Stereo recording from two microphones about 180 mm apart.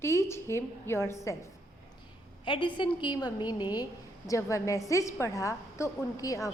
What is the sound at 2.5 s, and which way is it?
A woman's voice, 25° left (ahead or behind).